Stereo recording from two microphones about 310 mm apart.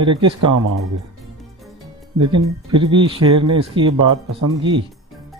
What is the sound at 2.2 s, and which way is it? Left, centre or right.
Speech, right.